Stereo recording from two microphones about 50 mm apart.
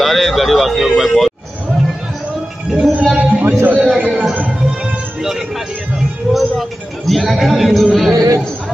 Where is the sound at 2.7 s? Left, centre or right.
Centre.